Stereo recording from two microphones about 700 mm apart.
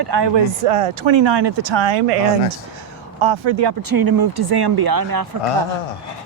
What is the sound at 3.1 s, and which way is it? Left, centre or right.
Speech, right.